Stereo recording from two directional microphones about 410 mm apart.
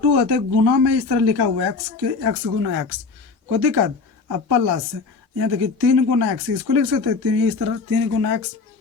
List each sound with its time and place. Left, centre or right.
0.1 s speech: right